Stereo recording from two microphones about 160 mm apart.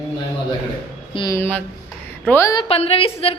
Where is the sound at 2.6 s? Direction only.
40° left (ahead or behind).